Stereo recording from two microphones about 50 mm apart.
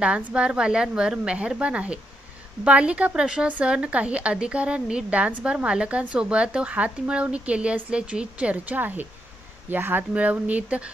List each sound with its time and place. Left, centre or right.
0.0 s a woman's voice: right
8.7 s speech: right
10.1 s speech: right